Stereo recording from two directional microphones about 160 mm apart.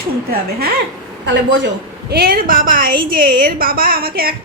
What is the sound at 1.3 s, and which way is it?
A woman's voice, 90° right.